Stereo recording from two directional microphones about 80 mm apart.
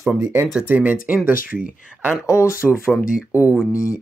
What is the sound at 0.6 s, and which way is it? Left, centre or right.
Speech, right.